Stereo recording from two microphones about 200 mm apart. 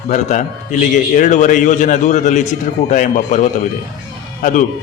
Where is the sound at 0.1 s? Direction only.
40° left (ahead or behind).